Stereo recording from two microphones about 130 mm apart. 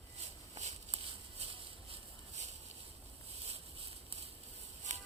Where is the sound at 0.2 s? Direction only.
55° right (ahead or behind).